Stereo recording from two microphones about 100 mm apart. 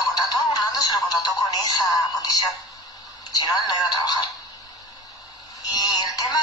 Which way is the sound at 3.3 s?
40° left (ahead or behind).